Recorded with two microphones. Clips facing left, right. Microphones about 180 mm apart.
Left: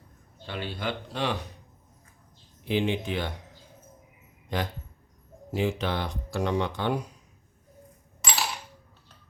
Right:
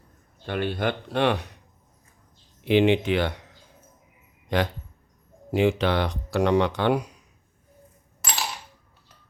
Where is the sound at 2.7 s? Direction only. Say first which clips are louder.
Right 8 dB; 75° right (ahead or behind).